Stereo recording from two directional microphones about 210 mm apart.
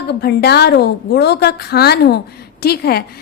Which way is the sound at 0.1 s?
50° left (ahead or behind).